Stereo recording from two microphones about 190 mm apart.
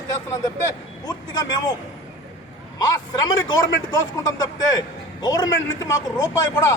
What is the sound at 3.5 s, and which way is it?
A man's voice, 20° left (ahead or behind).